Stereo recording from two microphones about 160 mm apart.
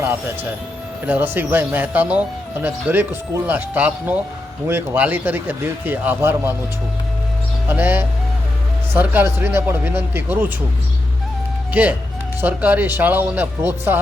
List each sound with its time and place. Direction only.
1.0 s speech: 10° right (ahead or behind)
7.7 s speech: 10° right (ahead or behind)
11.7 s speech: 10° right (ahead or behind)